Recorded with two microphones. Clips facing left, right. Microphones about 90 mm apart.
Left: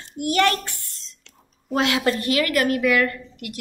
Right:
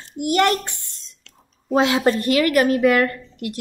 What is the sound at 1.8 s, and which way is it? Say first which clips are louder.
A woman's voice: right 4 dB; 25° right (ahead or behind).